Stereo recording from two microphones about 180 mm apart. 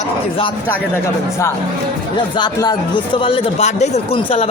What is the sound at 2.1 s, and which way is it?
Speech, 25° left (ahead or behind).